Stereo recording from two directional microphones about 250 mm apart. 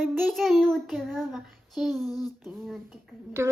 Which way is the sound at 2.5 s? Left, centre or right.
Centre.